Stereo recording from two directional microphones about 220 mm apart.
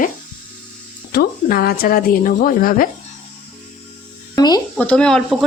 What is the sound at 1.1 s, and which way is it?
Speech, 45° left (ahead or behind).